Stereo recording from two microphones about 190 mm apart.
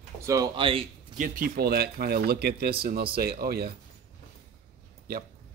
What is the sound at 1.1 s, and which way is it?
Speech, 45° right (ahead or behind).